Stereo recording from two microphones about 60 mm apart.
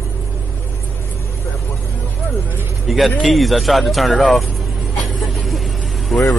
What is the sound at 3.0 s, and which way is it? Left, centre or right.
Speech, centre.